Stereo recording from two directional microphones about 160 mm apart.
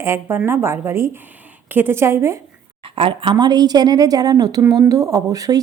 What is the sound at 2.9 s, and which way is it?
A woman's voice, 35° right (ahead or behind).